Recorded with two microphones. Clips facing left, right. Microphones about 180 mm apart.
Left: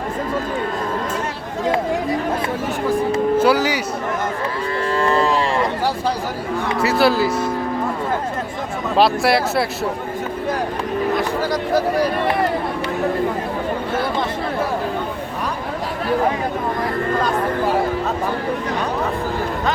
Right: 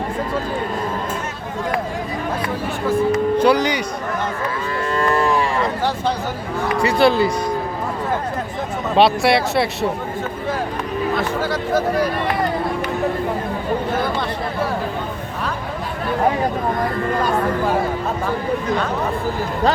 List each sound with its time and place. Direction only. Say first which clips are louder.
3.3 s speech: left 1 dB; 5° left (ahead or behind)
4.9 s cattle: even; 25° left (ahead or behind)
6.7 s speech: right 1 dB; 5° left (ahead or behind)
9.0 s speech: right 1 dB; centre (ahead or behind)